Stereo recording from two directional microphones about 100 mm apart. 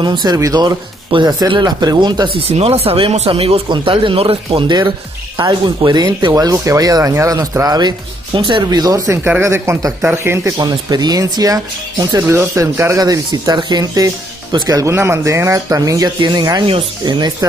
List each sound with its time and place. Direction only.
0.0 s speech: 45° right (ahead or behind)
2.4 s speech: 90° right; by 3.6 s 75° right (ahead or behind)
3.6 s speech: 55° right (ahead or behind)
5.4 s speech: 45° right (ahead or behind)
6.3 s speech: 35° right (ahead or behind)
8.4 s speech: 55° right (ahead or behind)
8.6 s speech: 40° right (ahead or behind); by 10.5 s 25° right (ahead or behind)
10.6 s speech: 45° right (ahead or behind)
13.0 s speech: 40° right (ahead or behind)
16.2 s speech: 45° right (ahead or behind)